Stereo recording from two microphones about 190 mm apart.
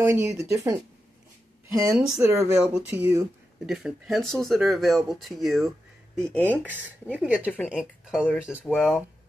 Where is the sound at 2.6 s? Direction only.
5° right (ahead or behind).